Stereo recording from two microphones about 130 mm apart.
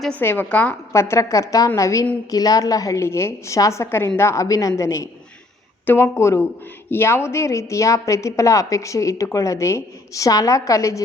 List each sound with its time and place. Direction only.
0.2 s a woman's voice: 15° left (ahead or behind)